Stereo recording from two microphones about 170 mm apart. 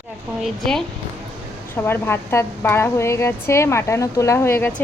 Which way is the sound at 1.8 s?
10° left (ahead or behind).